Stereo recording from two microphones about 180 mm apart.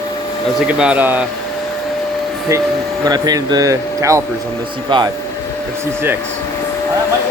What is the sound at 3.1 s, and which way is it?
Speech, 20° right (ahead or behind).